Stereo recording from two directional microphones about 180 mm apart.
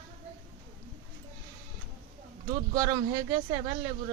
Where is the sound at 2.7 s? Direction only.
20° right (ahead or behind).